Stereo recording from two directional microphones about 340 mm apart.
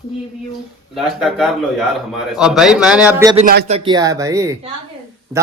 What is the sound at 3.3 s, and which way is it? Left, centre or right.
Speech, right.